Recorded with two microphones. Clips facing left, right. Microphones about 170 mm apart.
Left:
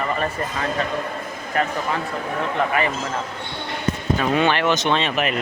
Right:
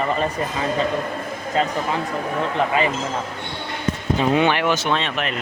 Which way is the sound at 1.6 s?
20° right (ahead or behind).